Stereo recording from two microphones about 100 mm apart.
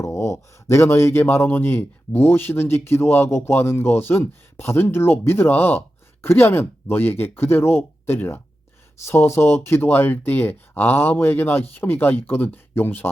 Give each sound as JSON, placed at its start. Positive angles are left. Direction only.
{"t": 0.0, "sound": "speech", "side_deg": 30}